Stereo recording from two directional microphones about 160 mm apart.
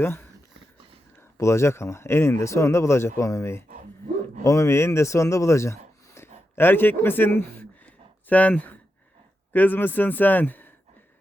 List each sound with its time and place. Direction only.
0.0 s speech: 15° left (ahead or behind)
1.4 s speech: 15° left (ahead or behind)